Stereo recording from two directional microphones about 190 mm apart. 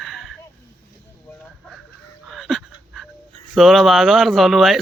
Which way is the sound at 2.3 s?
Centre (ahead or behind).